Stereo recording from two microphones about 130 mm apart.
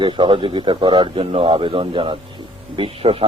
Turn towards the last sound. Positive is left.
turn(degrees=-45)  # may be behind; listen again after turning